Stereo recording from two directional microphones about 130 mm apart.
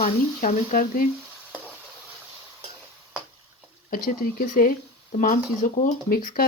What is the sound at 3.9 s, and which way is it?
Speech, 90° left.